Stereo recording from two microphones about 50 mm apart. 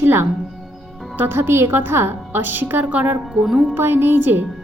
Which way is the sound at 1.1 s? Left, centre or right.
Right.